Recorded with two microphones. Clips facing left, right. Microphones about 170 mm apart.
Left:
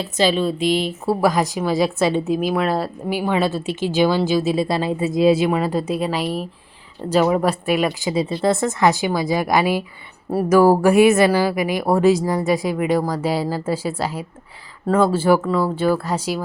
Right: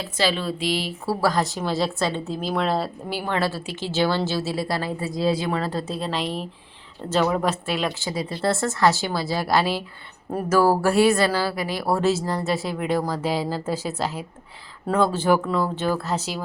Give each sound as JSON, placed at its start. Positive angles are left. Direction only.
{"t": 0.0, "sound": "a woman's voice", "side_deg": 20}
{"t": 8.1, "sound": "a woman's voice", "side_deg": 25}